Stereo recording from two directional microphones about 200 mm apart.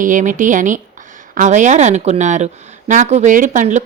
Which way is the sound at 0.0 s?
40° right (ahead or behind).